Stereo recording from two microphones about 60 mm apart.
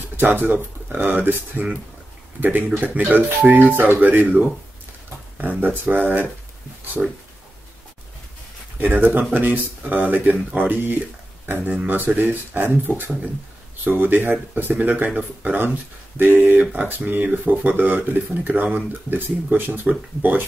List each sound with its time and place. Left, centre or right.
0.2 s speech: right
5.4 s speech: right
8.7 s speech: right